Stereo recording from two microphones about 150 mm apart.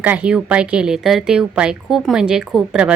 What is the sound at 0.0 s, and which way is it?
A woman's voice, 10° right (ahead or behind).